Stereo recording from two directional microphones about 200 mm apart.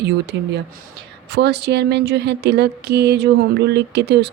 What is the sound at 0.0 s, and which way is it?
A woman's voice, 55° right (ahead or behind).